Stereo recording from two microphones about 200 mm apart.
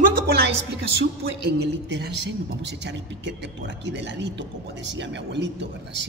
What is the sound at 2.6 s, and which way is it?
A man's voice, 60° right (ahead or behind).